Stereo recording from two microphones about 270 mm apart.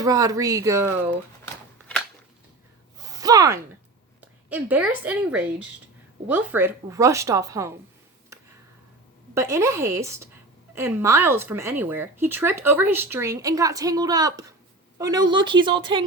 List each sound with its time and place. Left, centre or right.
0.0 s speech: centre
3.0 s gasp: centre
4.2 s a woman's voice: centre
9.3 s speech: centre